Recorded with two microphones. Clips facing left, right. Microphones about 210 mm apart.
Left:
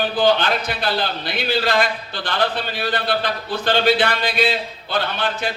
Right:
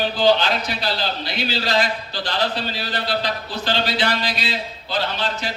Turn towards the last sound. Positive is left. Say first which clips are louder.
# left 2 dB
turn(degrees=55)  # may be behind; listen again after turning